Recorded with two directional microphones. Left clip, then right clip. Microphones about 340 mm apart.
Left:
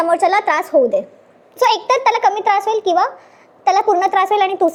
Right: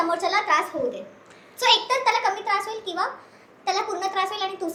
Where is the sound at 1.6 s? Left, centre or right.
Left.